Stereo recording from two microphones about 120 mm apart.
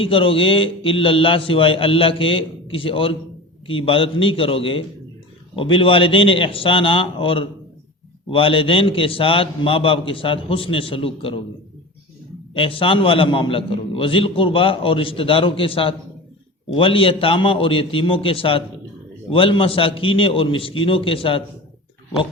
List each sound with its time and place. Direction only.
0.0 s a man's voice: 50° left (ahead or behind)
12.5 s a man's voice: 50° left (ahead or behind)